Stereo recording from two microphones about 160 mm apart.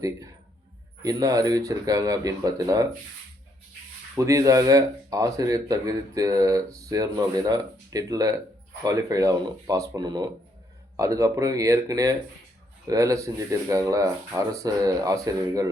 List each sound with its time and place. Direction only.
1.0 s speech: 20° right (ahead or behind)
4.1 s speech: 20° right (ahead or behind)